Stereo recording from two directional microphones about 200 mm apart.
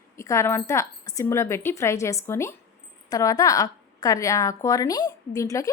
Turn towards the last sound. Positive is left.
turn(degrees=15)  # may be behind; listen again after turning